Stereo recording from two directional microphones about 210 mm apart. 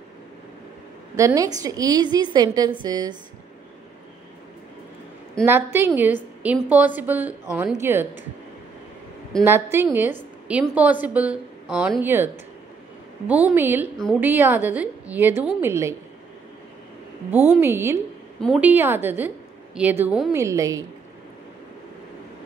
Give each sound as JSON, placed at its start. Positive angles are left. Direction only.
{"t": 1.1, "sound": "a woman's voice", "side_deg": -15}
{"t": 5.4, "sound": "a woman's voice", "side_deg": -10}
{"t": 9.4, "sound": "a woman's voice", "side_deg": -10}
{"t": 13.3, "sound": "a woman's voice", "side_deg": -10}
{"t": 17.3, "sound": "a woman's voice", "side_deg": -10}
{"t": 20.3, "sound": "a woman's voice", "side_deg": -15}